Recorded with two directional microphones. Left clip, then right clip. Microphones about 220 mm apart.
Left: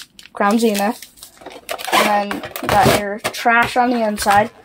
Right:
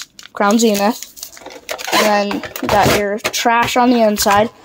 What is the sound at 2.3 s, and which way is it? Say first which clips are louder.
Speech: right 3 dB; 10° right (ahead or behind).